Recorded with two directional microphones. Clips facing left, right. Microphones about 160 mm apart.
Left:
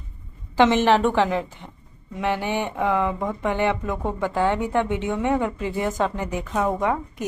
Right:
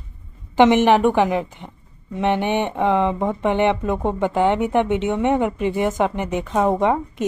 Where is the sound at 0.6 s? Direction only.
20° right (ahead or behind).